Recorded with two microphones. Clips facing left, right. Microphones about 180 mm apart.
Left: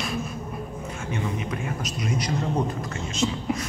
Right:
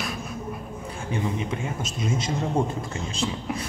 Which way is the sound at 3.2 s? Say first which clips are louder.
Left 3 dB; centre (ahead or behind).